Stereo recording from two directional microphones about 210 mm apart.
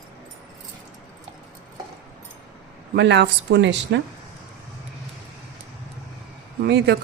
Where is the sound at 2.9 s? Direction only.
55° right (ahead or behind).